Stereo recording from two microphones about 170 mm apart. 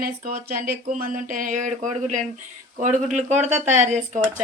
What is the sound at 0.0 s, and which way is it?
Speech, 60° right (ahead or behind).